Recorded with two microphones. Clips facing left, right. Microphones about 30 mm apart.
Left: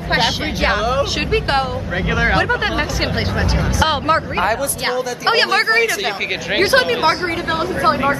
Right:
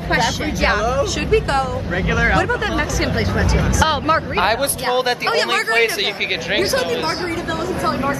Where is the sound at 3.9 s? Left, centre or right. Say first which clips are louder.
Left 1 dB; centre.